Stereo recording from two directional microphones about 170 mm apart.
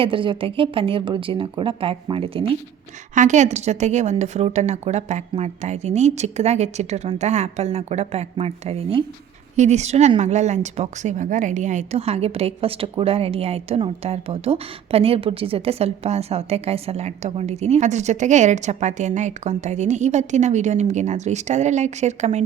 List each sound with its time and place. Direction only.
0.0 s a woman's voice: 30° right (ahead or behind)
3.2 s a woman's voice: 45° right (ahead or behind)